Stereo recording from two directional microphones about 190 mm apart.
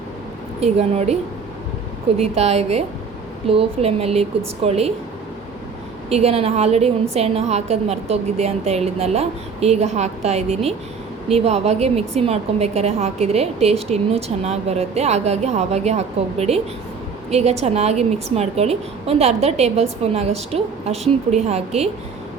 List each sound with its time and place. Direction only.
0.6 s a woman's voice: 35° right (ahead or behind)
6.1 s a woman's voice: 35° right (ahead or behind)